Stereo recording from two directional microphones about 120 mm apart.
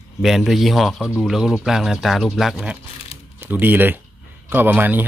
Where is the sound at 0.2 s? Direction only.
Centre (ahead or behind).